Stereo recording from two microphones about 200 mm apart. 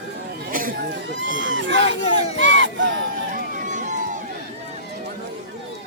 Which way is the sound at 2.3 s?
65° right (ahead or behind).